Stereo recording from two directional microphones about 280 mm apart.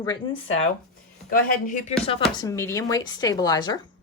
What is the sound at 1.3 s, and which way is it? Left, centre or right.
Speech, left.